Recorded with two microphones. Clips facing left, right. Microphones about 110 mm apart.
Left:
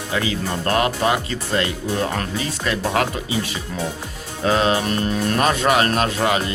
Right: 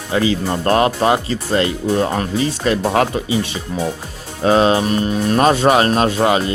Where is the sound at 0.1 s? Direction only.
30° right (ahead or behind).